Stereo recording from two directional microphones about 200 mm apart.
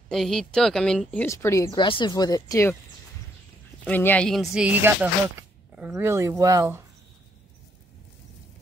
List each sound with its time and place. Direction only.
0.1 s a woman's voice: centre (ahead or behind)
3.8 s a woman's voice: 10° left (ahead or behind); by 6.8 s 15° right (ahead or behind)